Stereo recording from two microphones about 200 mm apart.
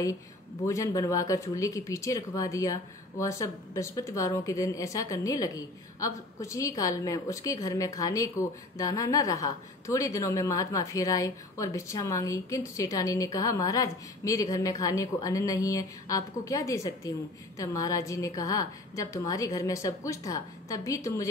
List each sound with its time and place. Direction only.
0.7 s speech: 15° left (ahead or behind)